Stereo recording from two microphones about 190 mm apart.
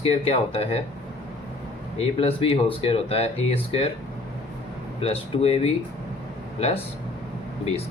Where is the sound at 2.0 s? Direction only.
30° left (ahead or behind).